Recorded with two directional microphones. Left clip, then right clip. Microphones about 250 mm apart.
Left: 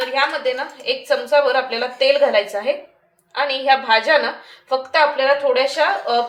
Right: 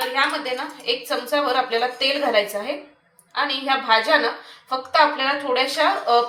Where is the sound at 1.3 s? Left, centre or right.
Left.